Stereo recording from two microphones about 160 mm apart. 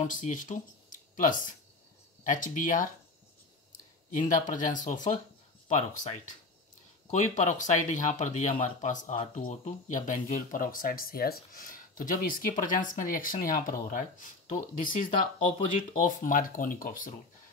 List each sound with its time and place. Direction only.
0.0 s speech: 55° left (ahead or behind)
14.8 s speech: 55° left (ahead or behind)